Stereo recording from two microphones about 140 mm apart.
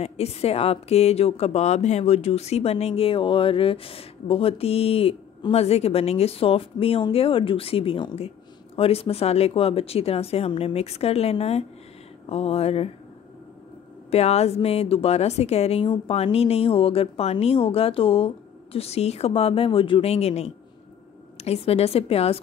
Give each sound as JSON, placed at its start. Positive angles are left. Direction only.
{"t": 0.0, "sound": "a woman's voice", "side_deg": 45}
{"t": 14.1, "sound": "a woman's voice", "side_deg": 50}